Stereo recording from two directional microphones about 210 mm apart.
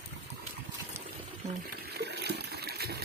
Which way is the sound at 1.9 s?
50° right (ahead or behind).